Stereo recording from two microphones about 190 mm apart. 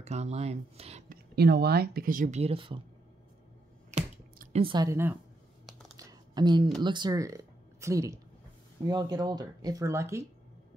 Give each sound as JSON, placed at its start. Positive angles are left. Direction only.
{"t": 0.0, "sound": "speech", "side_deg": -35}
{"t": 1.0, "sound": "speech", "side_deg": -55}
{"t": 3.9, "sound": "a sound", "side_deg": -35}
{"t": 4.7, "sound": "a woman's voice", "side_deg": -15}
{"t": 5.9, "sound": "a sound", "side_deg": -20}
{"t": 6.8, "sound": "speech", "side_deg": -25}